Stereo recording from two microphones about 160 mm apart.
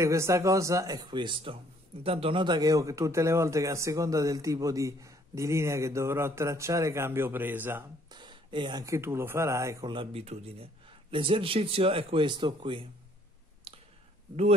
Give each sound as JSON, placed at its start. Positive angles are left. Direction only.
{"t": 0.0, "sound": "a man's voice", "side_deg": -20}
{"t": 8.1, "sound": "speech", "side_deg": -30}
{"t": 9.9, "sound": "a man's voice", "side_deg": -40}
{"t": 13.7, "sound": "clicking", "side_deg": -35}